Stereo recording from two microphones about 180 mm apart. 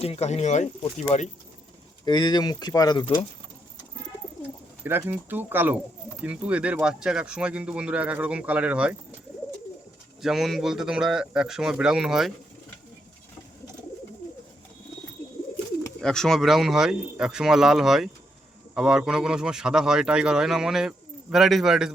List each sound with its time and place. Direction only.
0.0 s speech: 35° left (ahead or behind)
2.0 s speech: 25° left (ahead or behind)
4.8 s speech: 10° right (ahead or behind)
10.2 s speech: centre (ahead or behind)
16.0 s speech: 5° left (ahead or behind)